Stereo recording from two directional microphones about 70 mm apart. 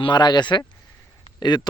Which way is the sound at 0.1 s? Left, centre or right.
Left.